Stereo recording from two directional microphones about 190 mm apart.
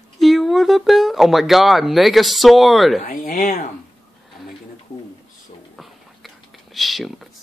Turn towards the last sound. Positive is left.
turn(degrees=0)  # may be behind; listen again after turning